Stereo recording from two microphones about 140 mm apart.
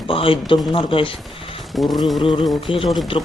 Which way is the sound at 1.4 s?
40° left (ahead or behind).